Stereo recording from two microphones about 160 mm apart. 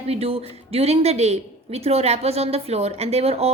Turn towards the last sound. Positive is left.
turn(degrees=-40)  # may be behind; listen again after turning